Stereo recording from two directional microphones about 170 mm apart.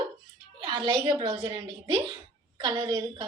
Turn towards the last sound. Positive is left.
turn(degrees=-20)  # may be behind; listen again after turning